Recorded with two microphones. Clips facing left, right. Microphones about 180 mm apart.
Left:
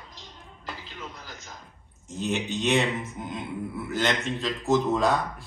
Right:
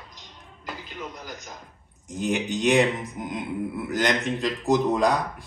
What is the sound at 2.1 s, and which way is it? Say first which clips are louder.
Speech: right 3 dB; 15° right (ahead or behind).